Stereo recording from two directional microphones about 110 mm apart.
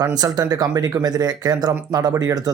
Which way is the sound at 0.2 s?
35° right (ahead or behind).